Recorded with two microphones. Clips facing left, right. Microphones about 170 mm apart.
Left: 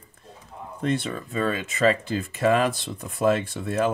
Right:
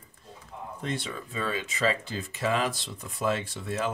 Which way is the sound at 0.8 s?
55° left (ahead or behind).